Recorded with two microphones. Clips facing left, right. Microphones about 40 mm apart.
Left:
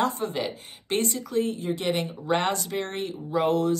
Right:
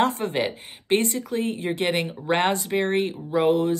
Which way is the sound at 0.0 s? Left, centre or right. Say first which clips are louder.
Right 4 dB; right.